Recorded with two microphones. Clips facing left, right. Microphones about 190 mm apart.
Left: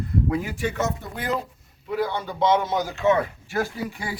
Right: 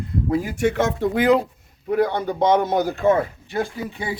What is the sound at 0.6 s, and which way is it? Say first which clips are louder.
Speech: right 7 dB; 90° right.